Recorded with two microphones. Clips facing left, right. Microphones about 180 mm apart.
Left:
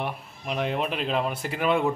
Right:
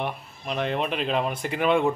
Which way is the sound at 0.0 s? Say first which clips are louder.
Right 1 dB; 5° left (ahead or behind).